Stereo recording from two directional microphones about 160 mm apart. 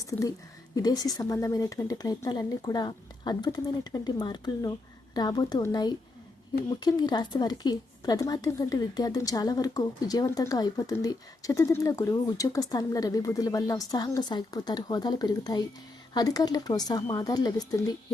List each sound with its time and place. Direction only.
0.0 s speech: 20° left (ahead or behind)